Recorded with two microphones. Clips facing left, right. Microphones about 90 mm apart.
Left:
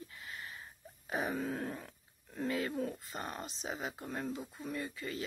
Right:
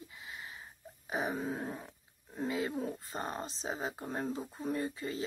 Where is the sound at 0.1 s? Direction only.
15° right (ahead or behind).